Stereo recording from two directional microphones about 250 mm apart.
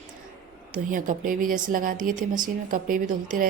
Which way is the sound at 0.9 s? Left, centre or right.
Right.